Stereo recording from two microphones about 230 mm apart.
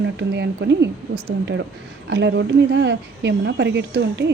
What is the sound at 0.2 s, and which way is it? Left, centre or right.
Speech, right.